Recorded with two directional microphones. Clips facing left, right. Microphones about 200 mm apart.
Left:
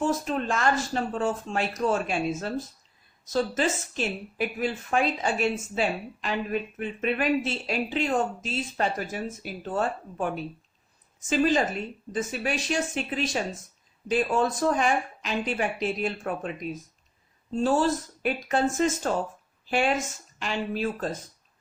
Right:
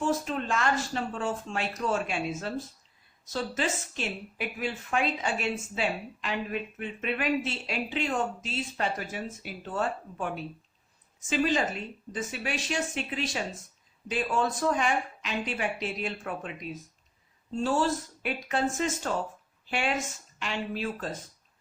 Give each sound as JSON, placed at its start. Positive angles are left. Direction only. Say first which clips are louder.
{"t": 0.0, "sound": "a woman's voice", "louder": "left 2 dB", "side_deg": 40}
{"t": 17.6, "sound": "speech", "louder": "left 4 dB", "side_deg": 45}
{"t": 20.4, "sound": "speech", "louder": "left 4 dB", "side_deg": 40}